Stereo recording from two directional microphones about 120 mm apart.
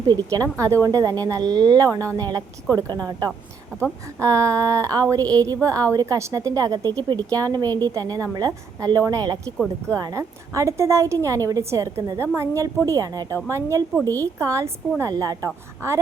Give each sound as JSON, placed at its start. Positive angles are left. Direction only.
{"t": 0.0, "sound": "a woman's voice", "side_deg": -35}